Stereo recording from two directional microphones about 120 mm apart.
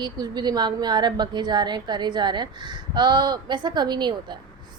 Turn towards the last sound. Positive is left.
turn(degrees=-40)  # may be behind; listen again after turning